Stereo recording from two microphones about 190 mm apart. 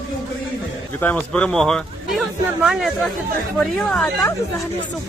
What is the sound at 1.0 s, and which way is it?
A man's voice, 10° left (ahead or behind).